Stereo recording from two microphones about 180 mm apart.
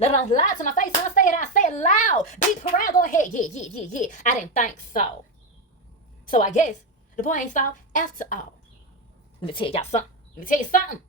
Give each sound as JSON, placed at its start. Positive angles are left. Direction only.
{"t": 0.0, "sound": "speech", "side_deg": 40}
{"t": 6.3, "sound": "speech", "side_deg": 45}
{"t": 9.4, "sound": "a woman's voice", "side_deg": 30}